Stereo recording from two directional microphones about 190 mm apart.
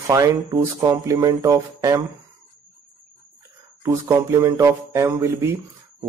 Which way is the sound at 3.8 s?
15° right (ahead or behind).